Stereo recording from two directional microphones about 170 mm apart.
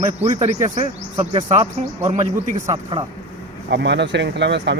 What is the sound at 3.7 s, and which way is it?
Speech, 90° right.